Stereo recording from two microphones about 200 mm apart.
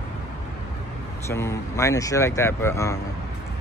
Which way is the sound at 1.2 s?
15° left (ahead or behind).